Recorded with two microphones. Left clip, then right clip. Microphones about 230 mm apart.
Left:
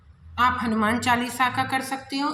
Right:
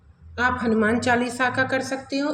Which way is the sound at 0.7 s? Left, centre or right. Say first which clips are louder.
Right 2 dB; left.